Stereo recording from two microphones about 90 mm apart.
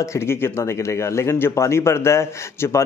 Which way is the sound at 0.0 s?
30° left (ahead or behind).